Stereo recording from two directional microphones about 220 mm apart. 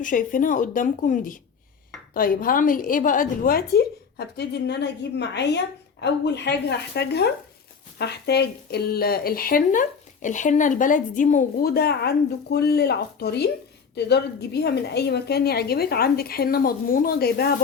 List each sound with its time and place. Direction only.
0.0 s a woman's voice: 35° left (ahead or behind)